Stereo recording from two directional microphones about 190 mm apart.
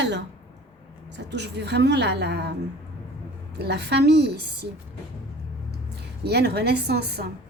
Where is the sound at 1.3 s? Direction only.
65° right (ahead or behind).